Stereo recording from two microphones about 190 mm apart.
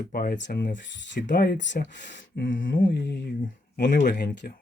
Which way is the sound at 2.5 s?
80° left.